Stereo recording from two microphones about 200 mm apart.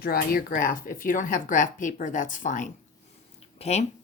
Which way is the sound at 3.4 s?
30° left (ahead or behind).